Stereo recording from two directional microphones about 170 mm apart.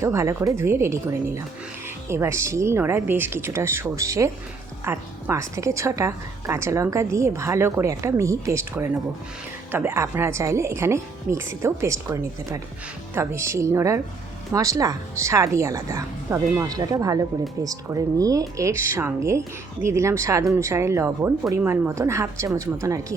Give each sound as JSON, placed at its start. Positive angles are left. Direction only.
{"t": 0.0, "sound": "a woman's voice", "side_deg": -15}